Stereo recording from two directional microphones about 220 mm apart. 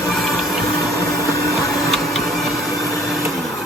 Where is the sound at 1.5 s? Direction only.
Centre (ahead or behind).